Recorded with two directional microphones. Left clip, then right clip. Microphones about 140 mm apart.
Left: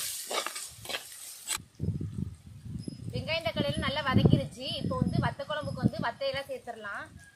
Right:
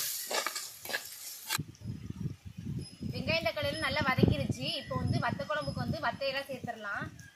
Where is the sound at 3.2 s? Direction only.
5° left (ahead or behind).